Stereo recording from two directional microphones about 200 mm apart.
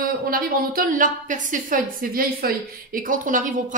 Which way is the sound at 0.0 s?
45° right (ahead or behind).